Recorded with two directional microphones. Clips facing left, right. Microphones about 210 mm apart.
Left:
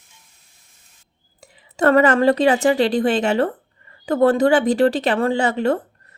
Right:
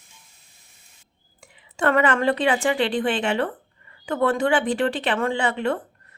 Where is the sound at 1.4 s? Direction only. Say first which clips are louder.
Left 6 dB; 40° left (ahead or behind).